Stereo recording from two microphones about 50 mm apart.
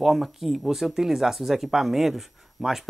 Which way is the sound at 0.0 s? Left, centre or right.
Centre.